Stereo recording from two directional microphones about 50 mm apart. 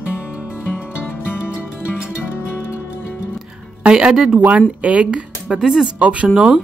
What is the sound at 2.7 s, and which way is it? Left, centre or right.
Music, left.